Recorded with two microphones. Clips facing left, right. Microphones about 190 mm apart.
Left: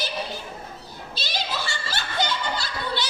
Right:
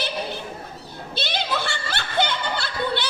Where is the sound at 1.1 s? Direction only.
60° right (ahead or behind).